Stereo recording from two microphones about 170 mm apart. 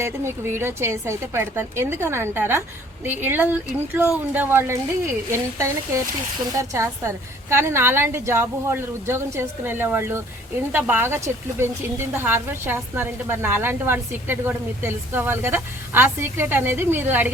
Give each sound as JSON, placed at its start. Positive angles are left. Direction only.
{"t": 0.0, "sound": "speech", "side_deg": -15}